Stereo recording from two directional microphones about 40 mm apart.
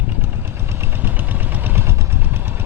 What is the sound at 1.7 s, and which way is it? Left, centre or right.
Vehicle, right.